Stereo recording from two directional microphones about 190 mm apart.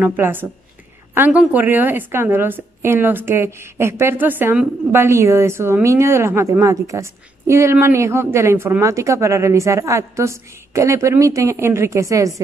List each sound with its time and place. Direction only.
0.0 s a woman's voice: 10° right (ahead or behind)